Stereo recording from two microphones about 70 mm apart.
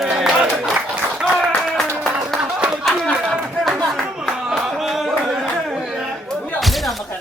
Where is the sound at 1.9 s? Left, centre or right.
Right.